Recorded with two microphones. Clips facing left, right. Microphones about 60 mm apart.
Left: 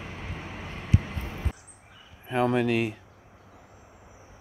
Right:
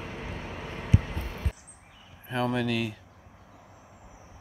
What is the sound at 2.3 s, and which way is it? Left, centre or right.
Speech, left.